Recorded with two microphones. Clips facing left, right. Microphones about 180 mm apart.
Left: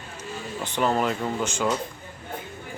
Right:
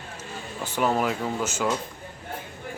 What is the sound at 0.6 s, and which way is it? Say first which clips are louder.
Speech: even; 5° right (ahead or behind).